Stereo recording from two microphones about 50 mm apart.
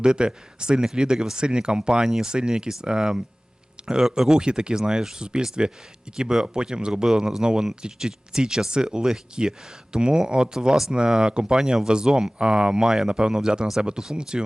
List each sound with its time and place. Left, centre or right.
0.0 s speech: centre